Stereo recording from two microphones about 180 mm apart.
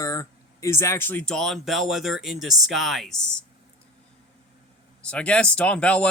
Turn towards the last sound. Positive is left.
turn(degrees=5)  # may be behind; listen again after turning